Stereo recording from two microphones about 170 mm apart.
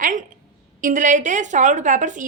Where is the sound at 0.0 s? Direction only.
50° right (ahead or behind).